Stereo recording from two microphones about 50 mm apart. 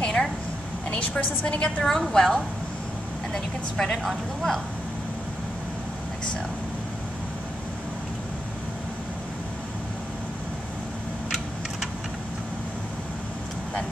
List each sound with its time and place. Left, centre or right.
0.0 s a sound: centre
0.9 s a woman's voice: left
1.9 s a woman's voice: centre
3.3 s speech: centre